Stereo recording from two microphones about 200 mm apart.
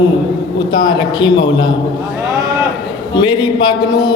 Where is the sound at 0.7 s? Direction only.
20° left (ahead or behind).